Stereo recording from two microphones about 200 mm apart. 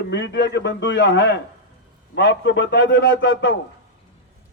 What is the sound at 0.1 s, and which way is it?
A man's voice, 60° left (ahead or behind).